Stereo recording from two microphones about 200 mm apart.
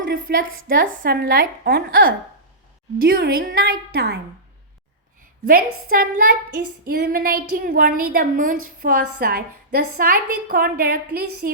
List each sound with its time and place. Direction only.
0.0 s a woman's voice: 45° right (ahead or behind)
5.5 s a woman's voice: 45° right (ahead or behind)